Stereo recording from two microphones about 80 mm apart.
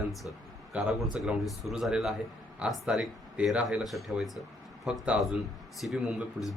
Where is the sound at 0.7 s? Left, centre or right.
Centre.